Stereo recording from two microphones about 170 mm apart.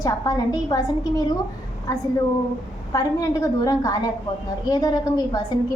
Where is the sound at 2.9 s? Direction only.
20° left (ahead or behind).